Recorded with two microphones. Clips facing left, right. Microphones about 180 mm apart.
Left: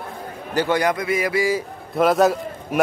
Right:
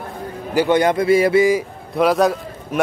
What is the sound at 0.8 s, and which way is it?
Speech, 30° right (ahead or behind).